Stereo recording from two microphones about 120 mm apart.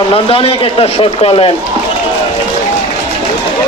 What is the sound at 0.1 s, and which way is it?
Speech, 50° left (ahead or behind).